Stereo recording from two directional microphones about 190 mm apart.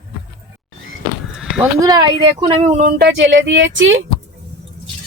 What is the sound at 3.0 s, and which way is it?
Speech, 70° right (ahead or behind).